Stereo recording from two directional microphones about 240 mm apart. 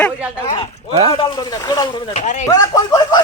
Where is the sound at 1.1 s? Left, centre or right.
Centre.